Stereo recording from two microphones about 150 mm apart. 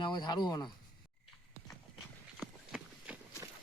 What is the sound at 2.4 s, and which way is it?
Run, 5° right (ahead or behind).